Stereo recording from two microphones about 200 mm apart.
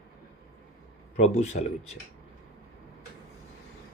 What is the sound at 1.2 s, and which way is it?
Speech, 35° left (ahead or behind).